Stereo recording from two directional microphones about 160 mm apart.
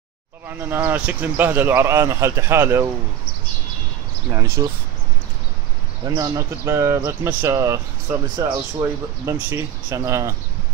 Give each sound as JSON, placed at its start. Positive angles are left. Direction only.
{"t": 0.7, "sound": "speech", "side_deg": -10}
{"t": 4.3, "sound": "speech", "side_deg": -20}
{"t": 6.0, "sound": "speech", "side_deg": -20}